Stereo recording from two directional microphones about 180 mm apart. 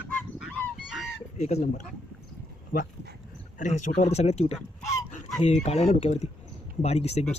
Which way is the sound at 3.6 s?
45° left (ahead or behind).